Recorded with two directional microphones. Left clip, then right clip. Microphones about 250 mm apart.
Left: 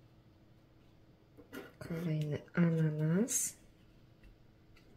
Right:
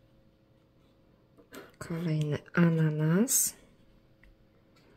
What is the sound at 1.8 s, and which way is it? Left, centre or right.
Speech, right.